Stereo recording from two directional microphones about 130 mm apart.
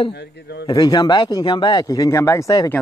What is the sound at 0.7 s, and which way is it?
Speech, 30° left (ahead or behind).